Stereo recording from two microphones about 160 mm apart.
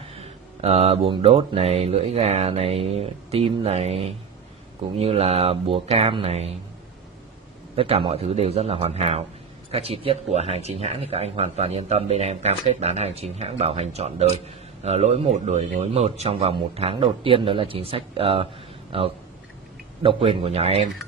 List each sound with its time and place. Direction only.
0.1 s speech: 40° right (ahead or behind)
7.7 s speech: 35° right (ahead or behind)